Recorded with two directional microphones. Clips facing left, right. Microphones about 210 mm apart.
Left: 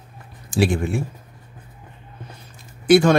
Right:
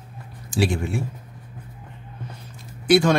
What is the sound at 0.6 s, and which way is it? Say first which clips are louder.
Speech: left 3 dB; 50° left (ahead or behind).